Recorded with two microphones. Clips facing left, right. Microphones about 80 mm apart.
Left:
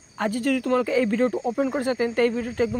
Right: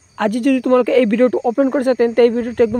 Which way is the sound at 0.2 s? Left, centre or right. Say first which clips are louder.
Right 8 dB; right.